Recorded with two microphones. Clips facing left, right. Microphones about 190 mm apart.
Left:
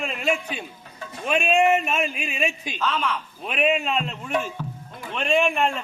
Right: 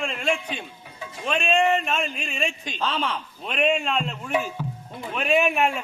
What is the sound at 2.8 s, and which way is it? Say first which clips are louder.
Speech: left 1 dB; 30° right (ahead or behind).